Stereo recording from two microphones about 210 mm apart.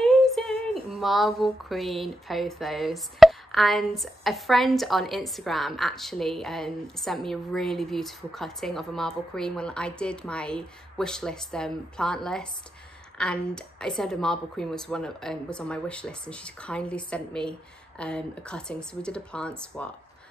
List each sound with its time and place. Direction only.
0.0 s female singing: centre (ahead or behind)